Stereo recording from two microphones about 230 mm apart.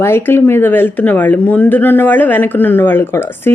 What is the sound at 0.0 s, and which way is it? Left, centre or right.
Speech, centre.